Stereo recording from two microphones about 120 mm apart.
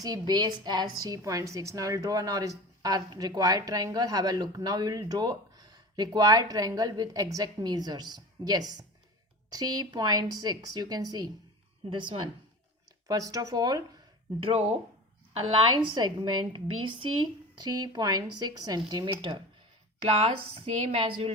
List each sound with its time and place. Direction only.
0.0 s a woman's voice: 35° right (ahead or behind)
13.1 s a woman's voice: 30° right (ahead or behind)
14.4 s speech: 60° right (ahead or behind)
15.3 s a woman's voice: 50° right (ahead or behind)